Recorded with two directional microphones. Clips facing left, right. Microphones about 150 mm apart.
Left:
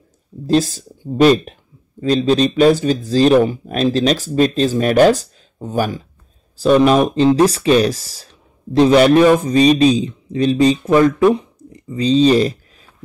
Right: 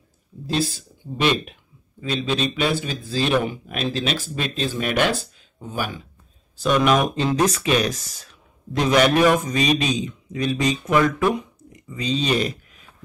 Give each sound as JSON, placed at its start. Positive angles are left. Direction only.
{"t": 0.5, "sound": "speech", "side_deg": 40}